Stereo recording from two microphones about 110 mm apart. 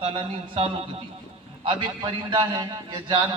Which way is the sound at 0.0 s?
60° right (ahead or behind).